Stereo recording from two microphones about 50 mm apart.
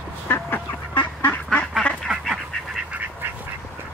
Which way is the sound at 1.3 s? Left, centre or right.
Left.